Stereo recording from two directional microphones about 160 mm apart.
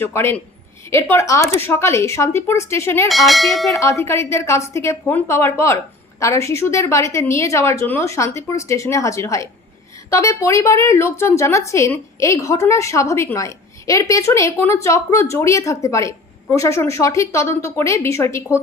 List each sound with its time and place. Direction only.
0.0 s a woman's voice: 15° left (ahead or behind)
3.1 s bell: centre (ahead or behind)
3.7 s a woman's voice: 20° left (ahead or behind)